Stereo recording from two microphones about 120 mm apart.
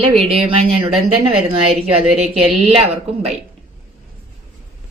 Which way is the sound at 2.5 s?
5° right (ahead or behind).